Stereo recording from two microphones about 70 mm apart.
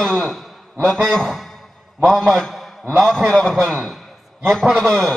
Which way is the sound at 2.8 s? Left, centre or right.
Right.